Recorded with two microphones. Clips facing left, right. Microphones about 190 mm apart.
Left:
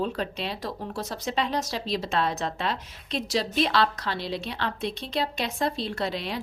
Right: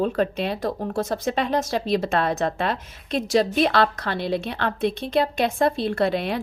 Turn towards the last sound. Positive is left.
turn(degrees=-55)  # may be behind; listen again after turning